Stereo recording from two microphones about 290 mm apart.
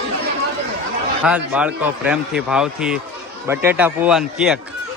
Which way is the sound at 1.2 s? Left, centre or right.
Centre.